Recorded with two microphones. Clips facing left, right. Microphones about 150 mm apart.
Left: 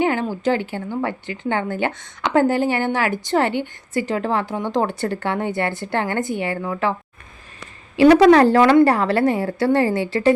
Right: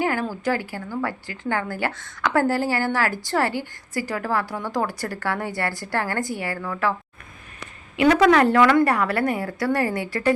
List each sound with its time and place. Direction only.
0.0 s a woman's voice: 20° left (ahead or behind)
7.9 s a woman's voice: 30° left (ahead or behind)